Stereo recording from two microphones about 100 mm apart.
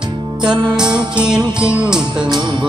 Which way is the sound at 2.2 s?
50° right (ahead or behind).